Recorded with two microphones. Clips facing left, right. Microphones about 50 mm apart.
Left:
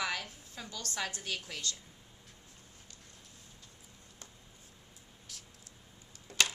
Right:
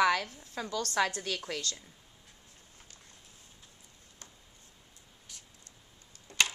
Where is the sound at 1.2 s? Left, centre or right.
Right.